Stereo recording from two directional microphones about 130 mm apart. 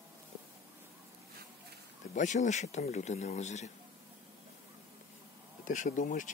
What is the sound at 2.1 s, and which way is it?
Speech, 70° left (ahead or behind).